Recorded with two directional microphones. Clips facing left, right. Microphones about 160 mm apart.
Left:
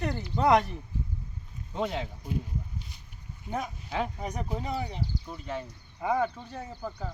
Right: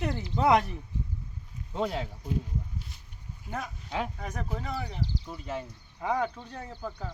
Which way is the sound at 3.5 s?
10° left (ahead or behind).